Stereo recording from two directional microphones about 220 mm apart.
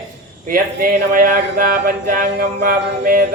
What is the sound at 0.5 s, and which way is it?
Music, 40° right (ahead or behind).